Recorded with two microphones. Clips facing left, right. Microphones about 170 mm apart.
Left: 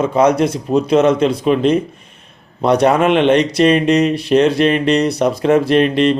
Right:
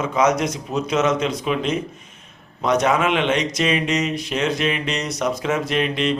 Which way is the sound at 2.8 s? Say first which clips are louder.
Left 9 dB; 60° left (ahead or behind).